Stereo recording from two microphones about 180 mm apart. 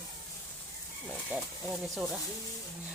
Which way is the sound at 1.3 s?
10° right (ahead or behind).